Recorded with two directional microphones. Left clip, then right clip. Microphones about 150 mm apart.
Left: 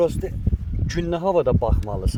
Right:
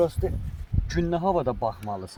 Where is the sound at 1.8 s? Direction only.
90° left.